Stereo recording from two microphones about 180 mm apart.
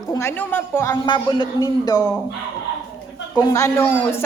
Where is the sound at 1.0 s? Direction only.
25° left (ahead or behind).